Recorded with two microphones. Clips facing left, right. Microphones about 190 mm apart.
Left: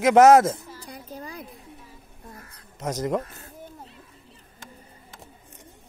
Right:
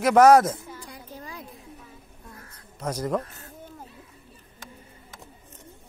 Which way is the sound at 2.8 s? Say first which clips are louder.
Left 1 dB; 25° left (ahead or behind).